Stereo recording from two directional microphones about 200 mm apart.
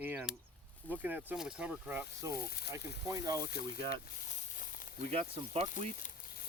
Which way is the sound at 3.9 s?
40° left (ahead or behind).